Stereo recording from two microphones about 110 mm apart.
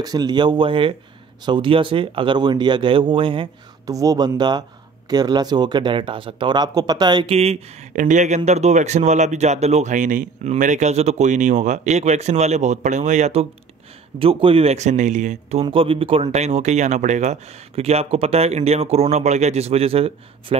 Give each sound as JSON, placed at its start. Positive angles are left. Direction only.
{"t": 0.0, "sound": "speech", "side_deg": -35}
{"t": 3.8, "sound": "speech", "side_deg": -35}
{"t": 7.2, "sound": "speech", "side_deg": -70}
{"t": 8.1, "sound": "speech", "side_deg": -90}
{"t": 14.1, "sound": "speech", "side_deg": -55}
{"t": 15.6, "sound": "speech", "side_deg": -55}